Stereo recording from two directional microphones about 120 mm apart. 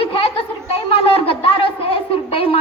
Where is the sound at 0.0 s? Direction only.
50° left (ahead or behind).